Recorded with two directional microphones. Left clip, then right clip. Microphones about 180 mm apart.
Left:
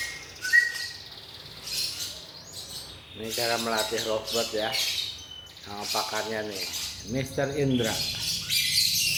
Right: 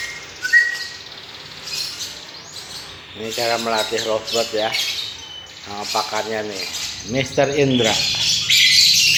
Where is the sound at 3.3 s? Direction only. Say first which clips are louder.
Right 7 dB; 15° right (ahead or behind).